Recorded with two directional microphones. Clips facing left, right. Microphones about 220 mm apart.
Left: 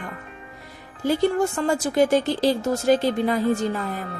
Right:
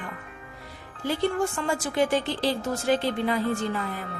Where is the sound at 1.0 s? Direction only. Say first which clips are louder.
Left 5 dB; 40° left (ahead or behind).